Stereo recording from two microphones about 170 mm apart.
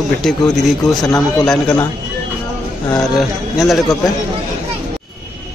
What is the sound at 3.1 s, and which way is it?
Speech, centre (ahead or behind).